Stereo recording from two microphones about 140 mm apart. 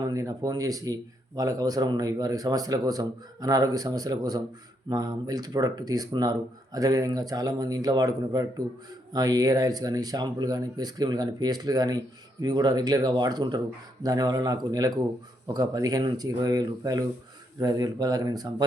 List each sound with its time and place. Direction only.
0.0 s a man's voice: 25° right (ahead or behind)